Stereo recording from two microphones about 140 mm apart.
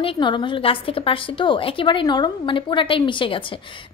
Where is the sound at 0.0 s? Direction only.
35° left (ahead or behind).